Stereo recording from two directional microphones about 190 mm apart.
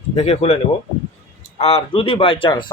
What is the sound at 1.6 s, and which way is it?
Speech, 30° left (ahead or behind).